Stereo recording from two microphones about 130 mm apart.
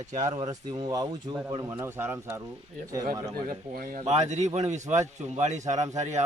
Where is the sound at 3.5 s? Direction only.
90° right.